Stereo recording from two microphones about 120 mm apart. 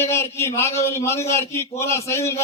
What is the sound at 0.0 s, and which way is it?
A man's voice, 20° left (ahead or behind).